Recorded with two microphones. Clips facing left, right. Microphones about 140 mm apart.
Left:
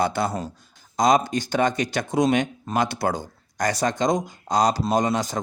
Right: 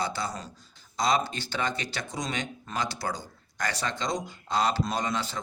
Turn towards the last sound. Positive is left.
turn(degrees=45)  # may be behind; listen again after turning